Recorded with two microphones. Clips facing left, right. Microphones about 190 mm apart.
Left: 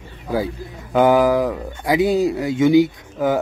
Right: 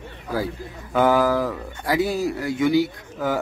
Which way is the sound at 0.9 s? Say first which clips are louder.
Left 4 dB; 15° left (ahead or behind).